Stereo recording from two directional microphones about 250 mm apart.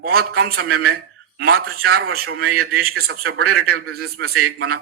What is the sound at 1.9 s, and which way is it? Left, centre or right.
A man's voice, right.